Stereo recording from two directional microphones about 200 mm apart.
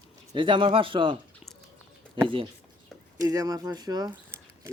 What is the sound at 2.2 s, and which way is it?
Speech, 25° right (ahead or behind).